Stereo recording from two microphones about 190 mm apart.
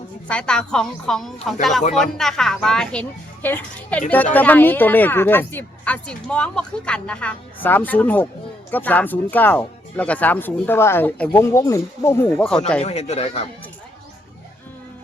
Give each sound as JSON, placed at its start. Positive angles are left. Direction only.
{"t": 0.3, "sound": "speech", "side_deg": 5}
{"t": 12.8, "sound": "speech", "side_deg": 35}